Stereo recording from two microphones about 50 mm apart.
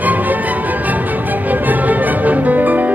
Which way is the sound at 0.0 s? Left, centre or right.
Right.